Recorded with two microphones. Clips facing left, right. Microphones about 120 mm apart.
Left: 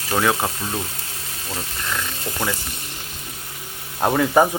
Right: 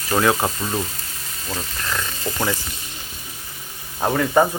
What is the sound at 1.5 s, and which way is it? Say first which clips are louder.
Speech: right 1 dB; 5° left (ahead or behind).